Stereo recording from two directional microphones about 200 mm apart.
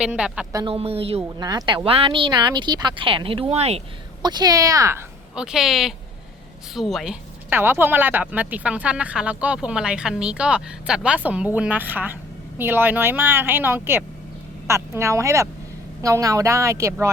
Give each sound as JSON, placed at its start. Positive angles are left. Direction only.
{"t": 0.0, "sound": "a woman's voice", "side_deg": -5}
{"t": 0.5, "sound": "a woman's voice", "side_deg": -25}